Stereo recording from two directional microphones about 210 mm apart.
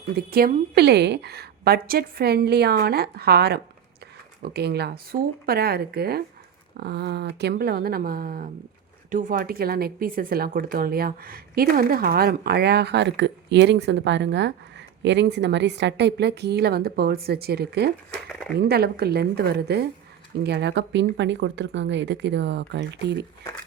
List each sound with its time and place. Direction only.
0.2 s a woman's voice: 45° right (ahead or behind)
18.3 s speech: centre (ahead or behind)
18.6 s a woman's voice: 50° right (ahead or behind)